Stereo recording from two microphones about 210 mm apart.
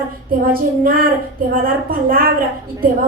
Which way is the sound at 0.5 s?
45° right (ahead or behind).